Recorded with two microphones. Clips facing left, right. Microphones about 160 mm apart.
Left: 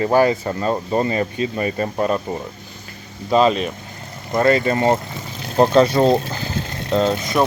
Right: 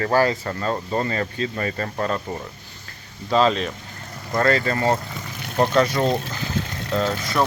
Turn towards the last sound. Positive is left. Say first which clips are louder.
# left 4 dB
turn(degrees=20)  # may be behind; listen again after turning